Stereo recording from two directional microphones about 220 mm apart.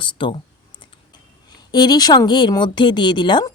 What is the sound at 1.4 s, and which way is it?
Speech, 20° left (ahead or behind).